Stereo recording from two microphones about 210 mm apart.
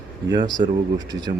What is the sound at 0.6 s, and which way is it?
Speech, 45° right (ahead or behind).